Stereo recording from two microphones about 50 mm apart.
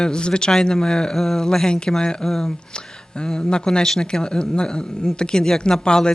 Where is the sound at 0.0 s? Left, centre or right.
Centre.